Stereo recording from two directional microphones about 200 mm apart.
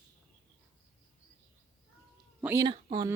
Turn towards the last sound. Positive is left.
turn(degrees=-20)  # may be behind; listen again after turning